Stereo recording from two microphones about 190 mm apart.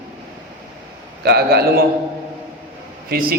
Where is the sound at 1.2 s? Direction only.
55° right (ahead or behind).